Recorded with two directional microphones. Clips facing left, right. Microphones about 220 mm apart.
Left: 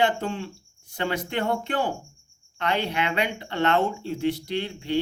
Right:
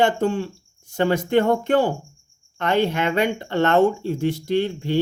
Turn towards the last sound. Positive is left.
turn(degrees=-45)  # may be behind; listen again after turning